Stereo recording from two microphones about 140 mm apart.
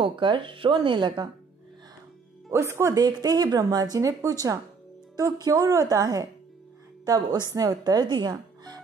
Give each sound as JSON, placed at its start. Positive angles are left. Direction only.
{"t": 0.0, "sound": "speech", "side_deg": -35}
{"t": 2.5, "sound": "speech", "side_deg": -20}